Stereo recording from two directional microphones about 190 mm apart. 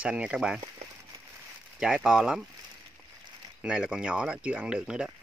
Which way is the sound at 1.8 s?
5° right (ahead or behind).